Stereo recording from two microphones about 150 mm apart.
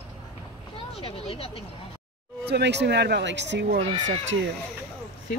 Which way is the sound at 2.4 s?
90° right.